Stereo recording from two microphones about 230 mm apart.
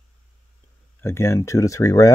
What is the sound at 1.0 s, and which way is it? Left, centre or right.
Speech, centre.